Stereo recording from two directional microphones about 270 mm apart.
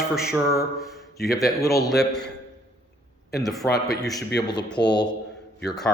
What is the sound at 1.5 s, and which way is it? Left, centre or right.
Speech, centre.